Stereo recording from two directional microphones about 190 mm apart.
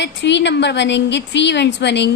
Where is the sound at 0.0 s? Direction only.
65° left (ahead or behind).